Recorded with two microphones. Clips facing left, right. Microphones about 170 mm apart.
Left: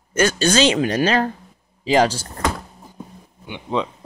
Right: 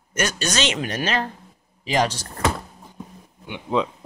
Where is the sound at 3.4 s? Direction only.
Centre (ahead or behind).